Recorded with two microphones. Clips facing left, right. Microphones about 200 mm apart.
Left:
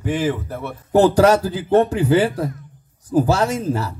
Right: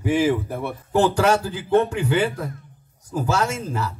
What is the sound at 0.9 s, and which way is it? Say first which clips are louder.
A man's voice: left 5 dB; 40° left (ahead or behind).